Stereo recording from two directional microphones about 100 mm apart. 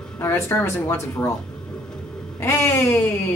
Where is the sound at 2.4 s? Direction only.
25° left (ahead or behind).